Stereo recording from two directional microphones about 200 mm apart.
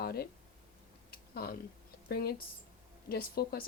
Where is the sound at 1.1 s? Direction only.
50° left (ahead or behind).